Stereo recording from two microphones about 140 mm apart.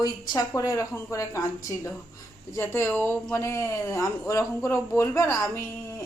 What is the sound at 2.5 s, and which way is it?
Speech, 20° left (ahead or behind).